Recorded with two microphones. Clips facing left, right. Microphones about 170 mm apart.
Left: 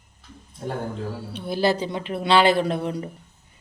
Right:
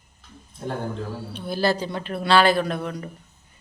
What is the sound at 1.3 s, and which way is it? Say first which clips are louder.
Speech: left 1 dB; 20° left (ahead or behind).